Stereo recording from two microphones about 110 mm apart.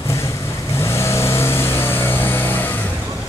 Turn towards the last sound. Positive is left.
turn(degrees=15)  # may be behind; listen again after turning